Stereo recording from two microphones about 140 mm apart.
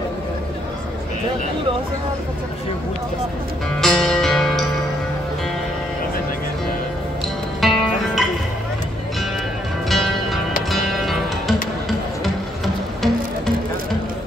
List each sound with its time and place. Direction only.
3.8 s music: 5° left (ahead or behind)
7.6 s music: centre (ahead or behind)
9.8 s music: centre (ahead or behind)